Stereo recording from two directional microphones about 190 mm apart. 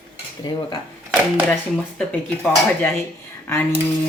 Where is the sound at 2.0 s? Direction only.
10° left (ahead or behind).